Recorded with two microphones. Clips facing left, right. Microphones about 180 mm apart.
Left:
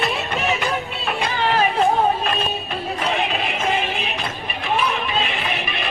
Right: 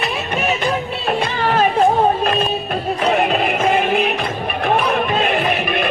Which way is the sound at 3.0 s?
55° right (ahead or behind).